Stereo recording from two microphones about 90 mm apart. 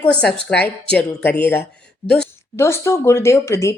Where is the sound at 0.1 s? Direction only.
10° left (ahead or behind).